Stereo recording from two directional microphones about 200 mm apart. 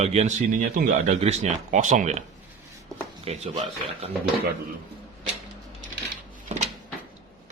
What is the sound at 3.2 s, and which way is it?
Speech, 35° right (ahead or behind).